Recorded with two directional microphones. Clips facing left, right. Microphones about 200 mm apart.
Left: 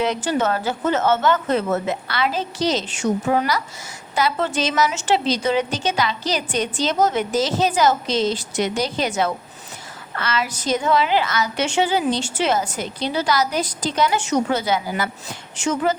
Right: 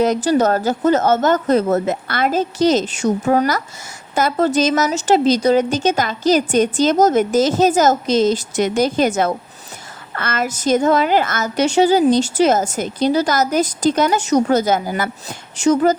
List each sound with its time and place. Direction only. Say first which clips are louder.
0.0 s a woman's voice: right 6 dB; 40° right (ahead or behind)